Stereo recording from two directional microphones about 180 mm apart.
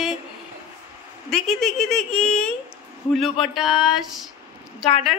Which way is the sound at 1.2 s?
Centre (ahead or behind).